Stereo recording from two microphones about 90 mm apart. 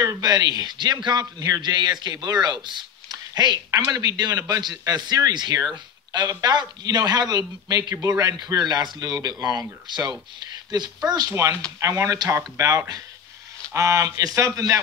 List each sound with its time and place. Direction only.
0.0 s a man's voice: 40° right (ahead or behind)
12.3 s speech: 30° right (ahead or behind)